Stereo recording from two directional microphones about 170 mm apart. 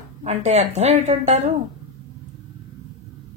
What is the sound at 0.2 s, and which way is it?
A woman's voice, 40° right (ahead or behind).